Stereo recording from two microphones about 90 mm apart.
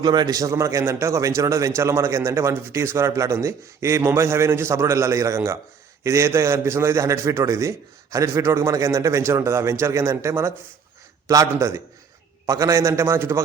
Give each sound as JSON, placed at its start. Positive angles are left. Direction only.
{"t": 0.0, "sound": "a man's voice", "side_deg": -50}
{"t": 12.5, "sound": "a man's voice", "side_deg": -40}